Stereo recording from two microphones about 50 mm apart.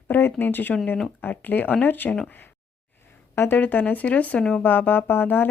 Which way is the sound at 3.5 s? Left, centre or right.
Left.